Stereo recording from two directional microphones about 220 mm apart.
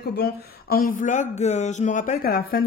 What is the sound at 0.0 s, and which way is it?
Speech, 45° left (ahead or behind).